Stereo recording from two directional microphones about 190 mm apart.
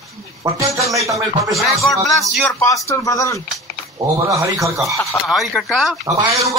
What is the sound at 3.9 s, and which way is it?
Speech, 15° right (ahead or behind).